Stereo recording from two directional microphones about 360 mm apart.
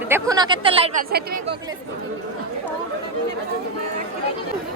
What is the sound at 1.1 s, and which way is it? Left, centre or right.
Speech, right.